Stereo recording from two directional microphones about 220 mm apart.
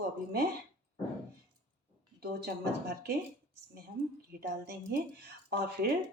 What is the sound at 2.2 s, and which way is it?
Speech, 45° right (ahead or behind).